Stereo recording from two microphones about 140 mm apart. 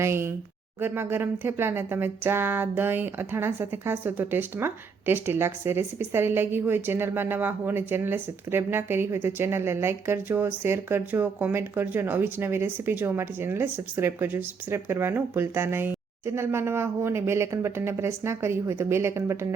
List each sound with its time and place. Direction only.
0.0 s speech: 20° right (ahead or behind)